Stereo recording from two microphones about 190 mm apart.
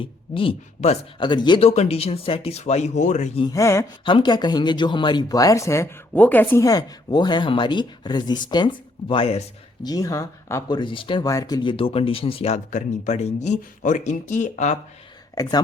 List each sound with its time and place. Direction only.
0.0 s speech: 30° left (ahead or behind)
3.4 s speech: 15° left (ahead or behind)
9.8 s speech: 20° left (ahead or behind); by 14.8 s 40° left (ahead or behind)
15.4 s speech: 20° left (ahead or behind)